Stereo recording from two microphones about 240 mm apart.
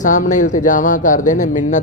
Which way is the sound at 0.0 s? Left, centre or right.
Left.